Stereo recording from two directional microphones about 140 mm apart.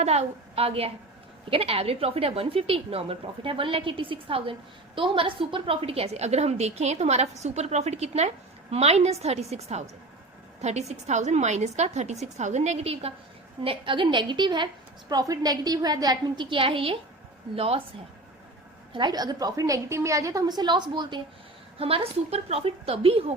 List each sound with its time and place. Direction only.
0.0 s a woman's voice: 50° right (ahead or behind)
18.9 s a woman's voice: 30° right (ahead or behind)